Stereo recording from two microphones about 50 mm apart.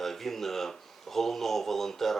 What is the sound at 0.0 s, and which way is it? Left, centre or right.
Speech, centre.